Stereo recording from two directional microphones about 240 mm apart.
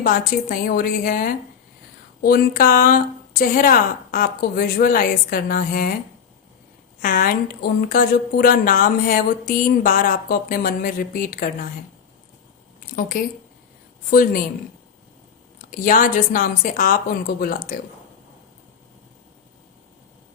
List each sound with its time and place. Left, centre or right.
0.0 s a woman's voice: left
7.0 s a woman's voice: left
12.9 s a woman's voice: left
15.5 s a woman's voice: left